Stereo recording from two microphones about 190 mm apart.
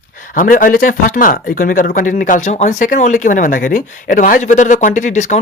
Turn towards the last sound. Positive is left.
turn(degrees=40)  # may be behind; listen again after turning